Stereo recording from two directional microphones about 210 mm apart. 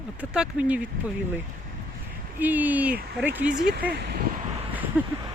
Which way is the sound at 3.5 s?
45° right (ahead or behind).